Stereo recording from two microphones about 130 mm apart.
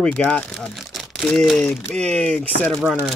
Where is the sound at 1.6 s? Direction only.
20° left (ahead or behind).